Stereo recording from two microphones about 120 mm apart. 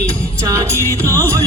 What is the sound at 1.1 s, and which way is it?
Music, 25° right (ahead or behind).